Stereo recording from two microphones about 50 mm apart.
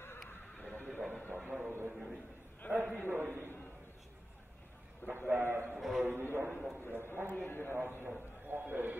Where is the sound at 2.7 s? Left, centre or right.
Right.